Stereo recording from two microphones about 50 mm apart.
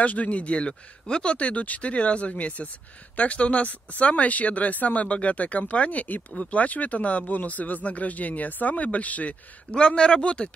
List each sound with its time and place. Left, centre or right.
0.0 s speech: left